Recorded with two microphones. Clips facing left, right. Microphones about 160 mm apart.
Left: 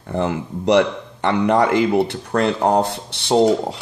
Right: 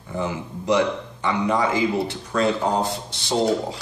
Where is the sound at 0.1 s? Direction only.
65° left (ahead or behind).